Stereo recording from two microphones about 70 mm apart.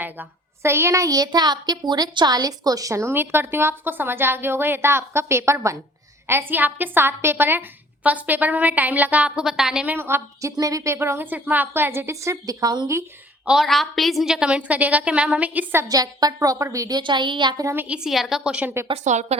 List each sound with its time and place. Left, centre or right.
0.0 s a woman's voice: right; by 9.8 s centre
9.8 s a woman's voice: right
10.6 s speech: right
11.3 s a woman's voice: right
13.4 s a woman's voice: centre
13.7 s a woman's voice: centre
14.7 s a woman's voice: right
15.9 s a woman's voice: right
16.9 s a woman's voice: right
17.8 s a woman's voice: centre